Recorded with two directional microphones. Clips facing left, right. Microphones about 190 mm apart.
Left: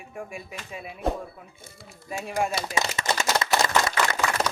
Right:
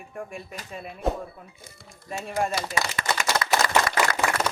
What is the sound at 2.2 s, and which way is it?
Speech, 5° left (ahead or behind).